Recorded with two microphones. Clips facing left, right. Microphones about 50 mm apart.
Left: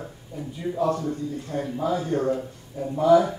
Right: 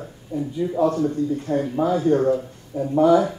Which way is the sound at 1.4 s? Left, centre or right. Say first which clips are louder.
Right 3 dB; right.